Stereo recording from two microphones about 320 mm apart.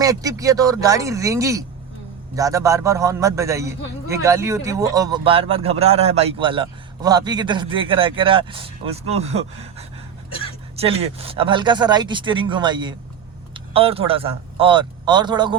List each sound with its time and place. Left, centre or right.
0.0 s a man's voice: centre
10.2 s a sound: centre
10.8 s a man's voice: centre